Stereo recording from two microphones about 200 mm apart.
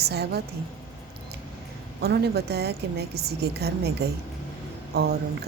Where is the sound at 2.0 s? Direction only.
55° right (ahead or behind).